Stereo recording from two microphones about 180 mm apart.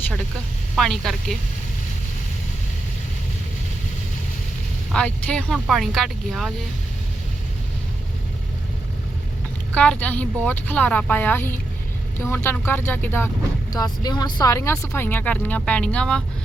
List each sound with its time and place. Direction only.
0.8 s speech: centre (ahead or behind)
4.9 s speech: 5° left (ahead or behind)
9.7 s speech: 5° left (ahead or behind)